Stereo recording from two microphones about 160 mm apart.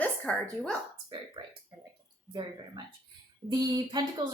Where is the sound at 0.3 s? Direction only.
5° left (ahead or behind).